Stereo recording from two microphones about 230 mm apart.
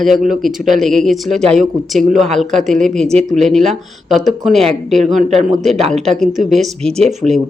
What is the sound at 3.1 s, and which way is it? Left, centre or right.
Speech, right.